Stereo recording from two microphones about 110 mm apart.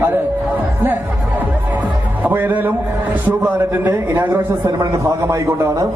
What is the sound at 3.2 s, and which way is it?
A man's voice, 15° right (ahead or behind).